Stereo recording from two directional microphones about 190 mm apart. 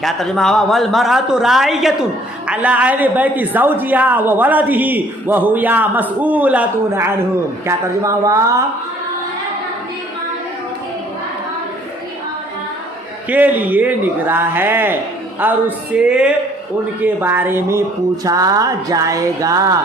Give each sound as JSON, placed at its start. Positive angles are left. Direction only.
{"t": 0.0, "sound": "a man's voice", "side_deg": 0}
{"t": 13.3, "sound": "a woman's voice", "side_deg": -10}